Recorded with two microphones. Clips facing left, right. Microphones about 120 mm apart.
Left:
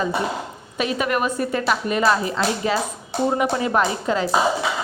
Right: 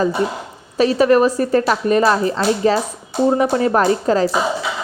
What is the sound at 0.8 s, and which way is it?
A woman's voice, 35° right (ahead or behind).